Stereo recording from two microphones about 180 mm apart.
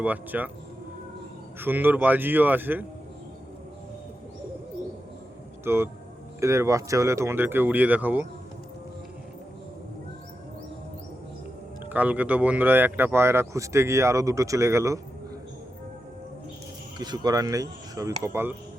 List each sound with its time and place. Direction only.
0.0 s speech: 10° right (ahead or behind)
1.5 s speech: 10° right (ahead or behind)
5.6 s speech: 15° right (ahead or behind)
11.9 s speech: 10° right (ahead or behind)
17.0 s speech: 20° right (ahead or behind)